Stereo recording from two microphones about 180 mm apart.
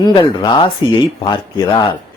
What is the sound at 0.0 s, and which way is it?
Speech, 25° left (ahead or behind).